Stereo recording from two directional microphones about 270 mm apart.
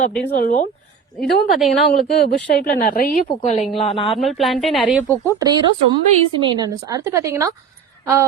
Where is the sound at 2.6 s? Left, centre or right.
Left.